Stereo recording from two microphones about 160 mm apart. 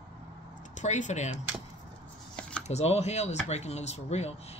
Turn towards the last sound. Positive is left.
turn(degrees=40)  # may be behind; listen again after turning